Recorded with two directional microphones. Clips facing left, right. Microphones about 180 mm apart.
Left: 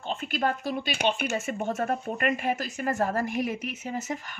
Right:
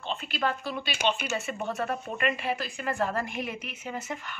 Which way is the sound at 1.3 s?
45° left (ahead or behind).